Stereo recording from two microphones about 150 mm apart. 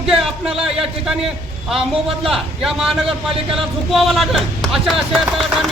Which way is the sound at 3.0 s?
40° right (ahead or behind).